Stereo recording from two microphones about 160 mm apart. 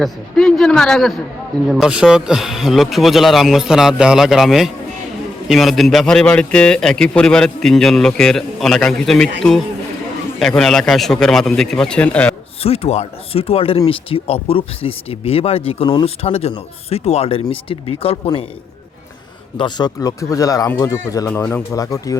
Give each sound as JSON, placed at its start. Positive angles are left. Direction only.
{"t": 0.0, "sound": "a man's voice", "side_deg": 0}
{"t": 10.4, "sound": "a man's voice", "side_deg": 5}
{"t": 12.6, "sound": "speech", "side_deg": 40}
{"t": 19.5, "sound": "speech", "side_deg": 30}